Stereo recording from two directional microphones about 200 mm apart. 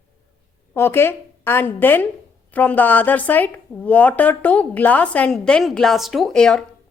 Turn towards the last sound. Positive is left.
turn(degrees=5)  # may be behind; listen again after turning